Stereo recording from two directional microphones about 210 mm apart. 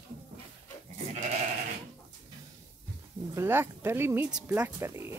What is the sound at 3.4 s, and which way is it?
Speech, 10° right (ahead or behind).